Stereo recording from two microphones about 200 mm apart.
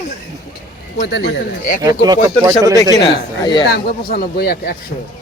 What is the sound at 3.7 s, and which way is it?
A man's voice, 50° left (ahead or behind).